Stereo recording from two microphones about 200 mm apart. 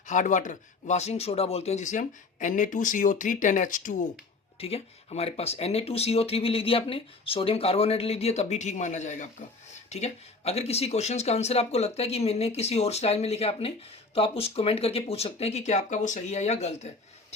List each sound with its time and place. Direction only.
0.1 s speech: 40° left (ahead or behind)